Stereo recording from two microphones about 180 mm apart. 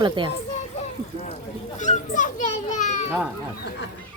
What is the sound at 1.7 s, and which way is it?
Children playing, 40° left (ahead or behind).